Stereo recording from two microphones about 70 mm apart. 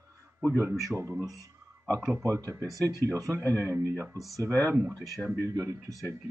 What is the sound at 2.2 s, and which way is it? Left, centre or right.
A man's voice, right.